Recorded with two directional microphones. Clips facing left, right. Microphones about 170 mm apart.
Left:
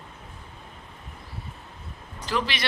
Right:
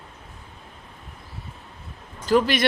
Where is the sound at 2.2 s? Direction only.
45° right (ahead or behind).